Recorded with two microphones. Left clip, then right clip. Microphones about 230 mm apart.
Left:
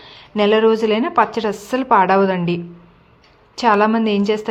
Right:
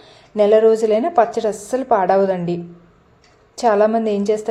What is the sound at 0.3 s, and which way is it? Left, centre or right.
A woman's voice, left.